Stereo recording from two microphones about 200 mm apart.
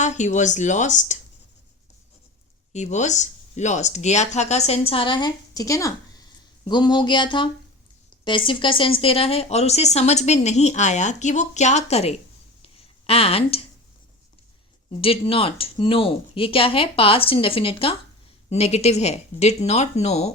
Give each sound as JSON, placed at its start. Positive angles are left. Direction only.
{"t": 0.0, "sound": "speech", "side_deg": 35}
{"t": 2.7, "sound": "speech", "side_deg": 35}
{"t": 12.6, "sound": "a sound", "side_deg": 30}
{"t": 15.0, "sound": "speech", "side_deg": 30}